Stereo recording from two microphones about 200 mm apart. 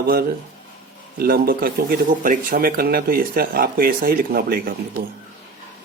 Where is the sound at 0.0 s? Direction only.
50° right (ahead or behind).